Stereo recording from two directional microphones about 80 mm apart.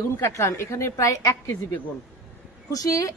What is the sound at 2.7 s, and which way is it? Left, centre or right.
Speech, left.